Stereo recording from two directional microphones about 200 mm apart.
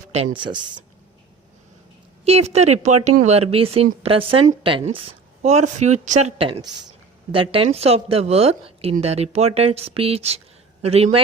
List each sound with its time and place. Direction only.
0.1 s a woman's voice: 30° right (ahead or behind)
2.2 s a woman's voice: 30° right (ahead or behind)